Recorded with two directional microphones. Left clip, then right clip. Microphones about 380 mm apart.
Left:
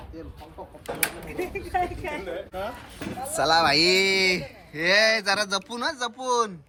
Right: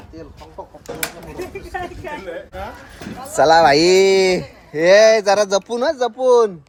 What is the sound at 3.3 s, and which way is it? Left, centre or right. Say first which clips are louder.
Speech: right 10 dB; right.